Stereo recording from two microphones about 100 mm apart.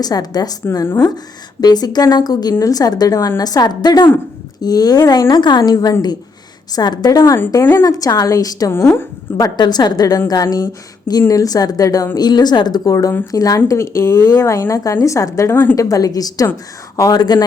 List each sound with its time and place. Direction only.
0.0 s a woman's voice: 40° left (ahead or behind)
7.6 s a woman's voice: 20° left (ahead or behind)
7.9 s a woman's voice: 35° left (ahead or behind)